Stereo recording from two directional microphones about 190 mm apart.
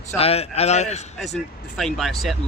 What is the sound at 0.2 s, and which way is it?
Speech, 30° left (ahead or behind).